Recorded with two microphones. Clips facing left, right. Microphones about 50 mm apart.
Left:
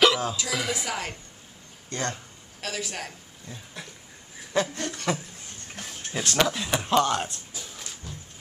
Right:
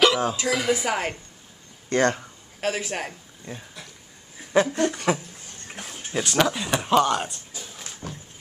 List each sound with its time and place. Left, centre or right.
0.2 s speech: centre
0.6 s speech: centre
0.8 s a woman's voice: right
1.9 s speech: right
4.5 s a sound: centre
4.9 s speech: centre
8.0 s a sound: right